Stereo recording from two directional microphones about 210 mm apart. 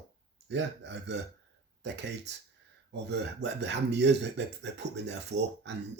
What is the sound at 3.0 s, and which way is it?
Speech, 55° right (ahead or behind).